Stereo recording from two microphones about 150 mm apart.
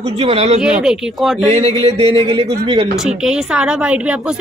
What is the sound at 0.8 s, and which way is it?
Speech, 5° right (ahead or behind).